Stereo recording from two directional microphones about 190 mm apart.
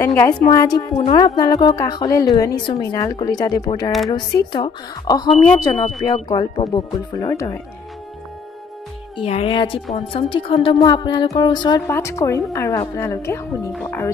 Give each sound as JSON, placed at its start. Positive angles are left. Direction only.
{"t": 0.0, "sound": "a woman's voice", "side_deg": 15}
{"t": 9.1, "sound": "a woman's voice", "side_deg": 30}